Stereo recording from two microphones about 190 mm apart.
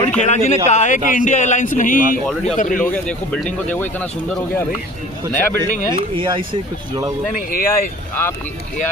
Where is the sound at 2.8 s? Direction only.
5° left (ahead or behind).